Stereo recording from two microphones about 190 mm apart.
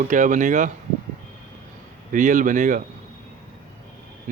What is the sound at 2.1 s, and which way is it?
Speech, 45° right (ahead or behind).